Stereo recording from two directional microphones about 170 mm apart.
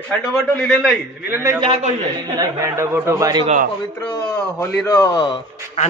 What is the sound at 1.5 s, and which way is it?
Speech, 30° right (ahead or behind).